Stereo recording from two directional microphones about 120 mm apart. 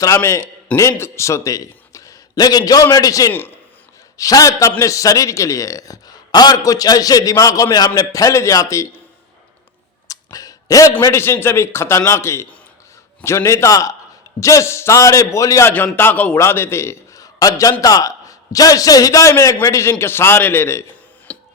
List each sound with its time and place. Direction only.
0.0 s a man's voice: 20° left (ahead or behind)
10.1 s a sound: 30° left (ahead or behind)
11.0 s a man's voice: 25° left (ahead or behind)
21.3 s music: 10° left (ahead or behind)